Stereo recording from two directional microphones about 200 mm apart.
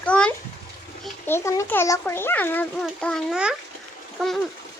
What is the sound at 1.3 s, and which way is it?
A child's voice, 15° left (ahead or behind).